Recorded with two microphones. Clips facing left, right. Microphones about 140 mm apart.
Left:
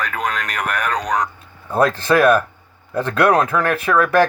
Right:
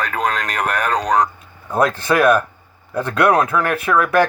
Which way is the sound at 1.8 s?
15° right (ahead or behind).